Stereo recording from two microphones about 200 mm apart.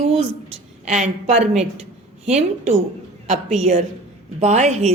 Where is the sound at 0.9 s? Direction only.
35° right (ahead or behind).